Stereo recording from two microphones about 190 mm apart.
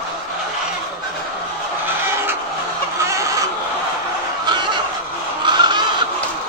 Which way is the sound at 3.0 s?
15° right (ahead or behind).